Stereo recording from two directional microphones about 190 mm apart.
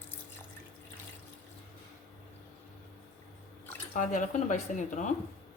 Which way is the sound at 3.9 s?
40° left (ahead or behind).